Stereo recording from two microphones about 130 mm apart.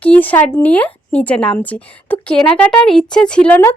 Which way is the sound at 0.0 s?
10° left (ahead or behind).